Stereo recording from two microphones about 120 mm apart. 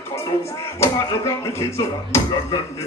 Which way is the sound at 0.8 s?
25° left (ahead or behind).